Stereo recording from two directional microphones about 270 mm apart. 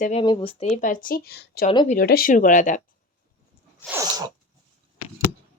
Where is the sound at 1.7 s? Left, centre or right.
Centre.